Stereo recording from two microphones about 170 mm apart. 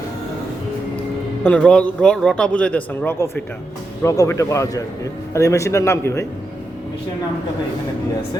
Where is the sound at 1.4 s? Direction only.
5° left (ahead or behind).